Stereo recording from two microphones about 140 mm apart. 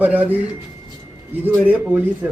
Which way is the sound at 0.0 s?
10° right (ahead or behind).